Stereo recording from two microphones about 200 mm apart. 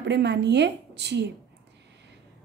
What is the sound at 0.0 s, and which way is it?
A woman's voice, 60° right (ahead or behind).